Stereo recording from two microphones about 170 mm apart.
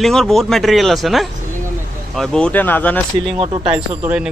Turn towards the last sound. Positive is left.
turn(degrees=-5)  # may be behind; listen again after turning